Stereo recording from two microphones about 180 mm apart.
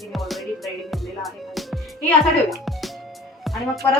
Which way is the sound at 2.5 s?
Centre (ahead or behind).